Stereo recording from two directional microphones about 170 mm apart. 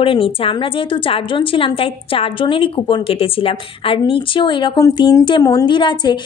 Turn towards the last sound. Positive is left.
turn(degrees=30)  # may be behind; listen again after turning